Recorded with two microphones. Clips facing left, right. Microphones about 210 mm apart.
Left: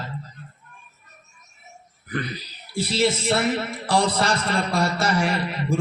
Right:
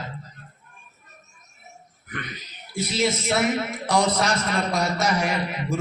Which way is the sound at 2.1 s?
35° left (ahead or behind).